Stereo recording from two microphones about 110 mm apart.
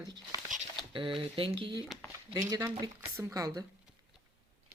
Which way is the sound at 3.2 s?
25° right (ahead or behind).